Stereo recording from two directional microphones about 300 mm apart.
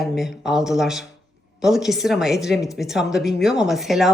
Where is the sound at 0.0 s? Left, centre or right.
Centre.